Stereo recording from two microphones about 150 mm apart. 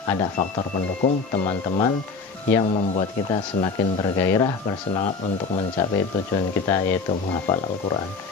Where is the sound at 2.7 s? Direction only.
45° left (ahead or behind).